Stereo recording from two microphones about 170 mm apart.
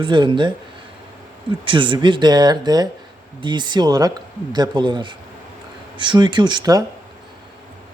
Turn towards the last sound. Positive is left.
turn(degrees=-20)  # may be behind; listen again after turning